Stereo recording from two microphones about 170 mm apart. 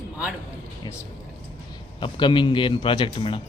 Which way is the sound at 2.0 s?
30° left (ahead or behind).